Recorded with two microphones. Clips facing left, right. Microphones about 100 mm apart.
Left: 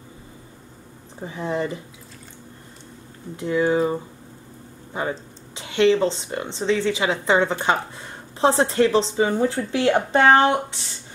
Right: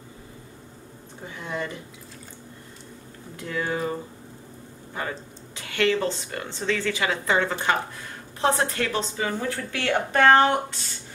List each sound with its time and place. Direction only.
1.2 s speech: 30° left (ahead or behind)
3.3 s speech: 20° left (ahead or behind)